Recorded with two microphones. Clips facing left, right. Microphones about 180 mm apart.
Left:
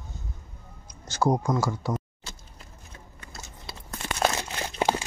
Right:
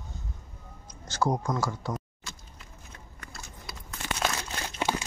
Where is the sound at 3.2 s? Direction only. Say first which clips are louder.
Left 1 dB; 25° left (ahead or behind).